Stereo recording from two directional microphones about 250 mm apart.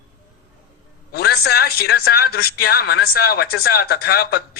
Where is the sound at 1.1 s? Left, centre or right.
Left.